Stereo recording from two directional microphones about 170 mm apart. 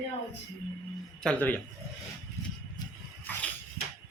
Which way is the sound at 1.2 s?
10° left (ahead or behind).